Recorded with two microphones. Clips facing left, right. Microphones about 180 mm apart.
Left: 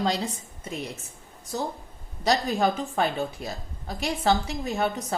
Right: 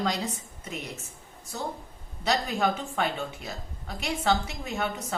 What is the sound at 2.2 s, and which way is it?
Speech, 35° left (ahead or behind).